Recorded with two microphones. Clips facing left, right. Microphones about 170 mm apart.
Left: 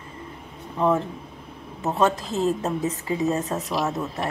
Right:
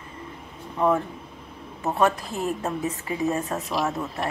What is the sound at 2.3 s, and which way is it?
Speech, 25° left (ahead or behind).